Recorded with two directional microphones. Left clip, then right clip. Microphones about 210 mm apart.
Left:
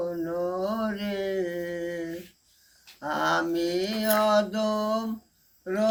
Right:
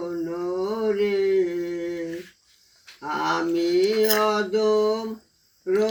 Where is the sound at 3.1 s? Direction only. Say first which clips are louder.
Right 1 dB; 25° left (ahead or behind).